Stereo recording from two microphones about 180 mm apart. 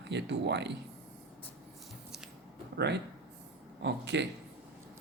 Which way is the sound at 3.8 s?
75° right (ahead or behind).